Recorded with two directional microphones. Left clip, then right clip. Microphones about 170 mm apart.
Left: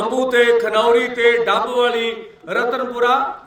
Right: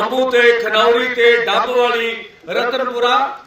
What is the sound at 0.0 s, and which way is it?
A man's voice, 30° left (ahead or behind).